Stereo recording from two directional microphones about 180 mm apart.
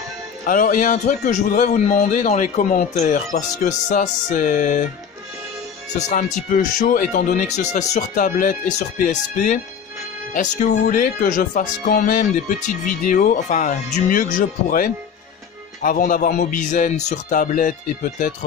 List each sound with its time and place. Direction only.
0.5 s speech: 45° left (ahead or behind)
5.9 s speech: 40° left (ahead or behind)